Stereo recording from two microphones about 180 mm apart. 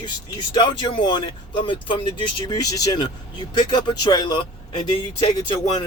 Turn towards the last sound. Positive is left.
turn(degrees=25)  # may be behind; listen again after turning